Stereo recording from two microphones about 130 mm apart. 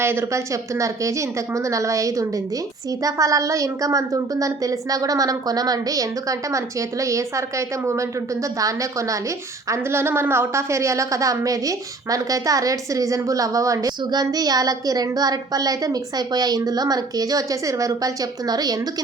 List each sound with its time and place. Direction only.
0.0 s a woman's voice: 20° right (ahead or behind)